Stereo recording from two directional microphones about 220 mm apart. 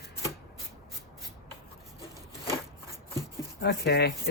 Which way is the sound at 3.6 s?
50° left (ahead or behind).